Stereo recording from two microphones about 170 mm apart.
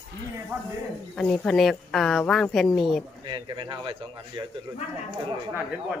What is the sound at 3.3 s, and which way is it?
Speech, 30° right (ahead or behind).